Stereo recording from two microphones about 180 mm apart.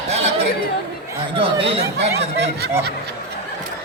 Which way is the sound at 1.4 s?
30° right (ahead or behind).